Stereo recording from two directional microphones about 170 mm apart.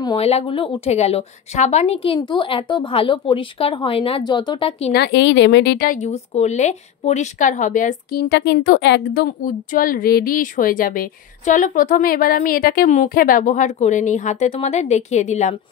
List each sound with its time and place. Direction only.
0.2 s a woman's voice: 35° left (ahead or behind)
2.1 s a woman's voice: 30° left (ahead or behind)
4.9 s speech: 85° left
5.9 s speech: 45° left (ahead or behind)